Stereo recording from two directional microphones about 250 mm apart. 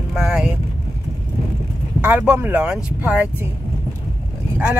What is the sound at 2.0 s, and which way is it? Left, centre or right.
Speech, centre.